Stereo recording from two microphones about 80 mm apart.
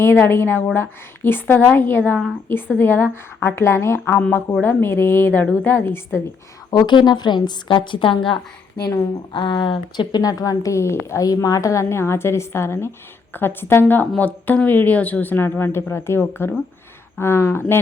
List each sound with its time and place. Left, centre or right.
0.0 s a woman's voice: left
6.7 s a woman's voice: left
10.2 s a woman's voice: left